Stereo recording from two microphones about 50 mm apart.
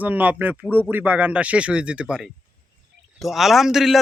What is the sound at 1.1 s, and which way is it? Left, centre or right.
Speech, right.